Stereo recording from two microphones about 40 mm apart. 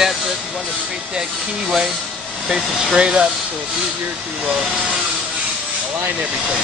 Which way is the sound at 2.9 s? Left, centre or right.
Right.